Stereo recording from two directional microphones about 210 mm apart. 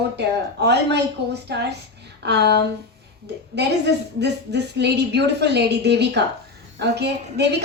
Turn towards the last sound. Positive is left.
turn(degrees=-50)  # may be behind; listen again after turning